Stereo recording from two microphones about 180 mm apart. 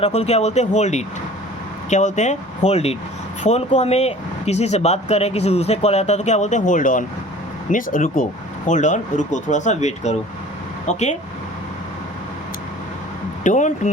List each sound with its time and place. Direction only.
0.0 s speech: 35° left (ahead or behind)
13.4 s speech: 45° left (ahead or behind)